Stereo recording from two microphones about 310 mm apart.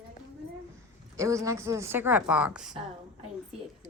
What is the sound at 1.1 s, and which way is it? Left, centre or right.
A woman's voice, centre.